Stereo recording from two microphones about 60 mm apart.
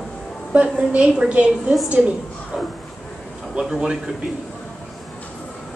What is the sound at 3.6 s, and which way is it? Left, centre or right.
Speech, right.